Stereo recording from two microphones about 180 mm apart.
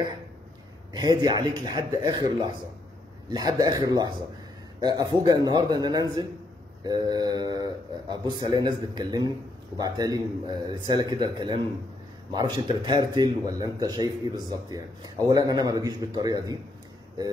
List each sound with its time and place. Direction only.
0.9 s speech: 25° right (ahead or behind)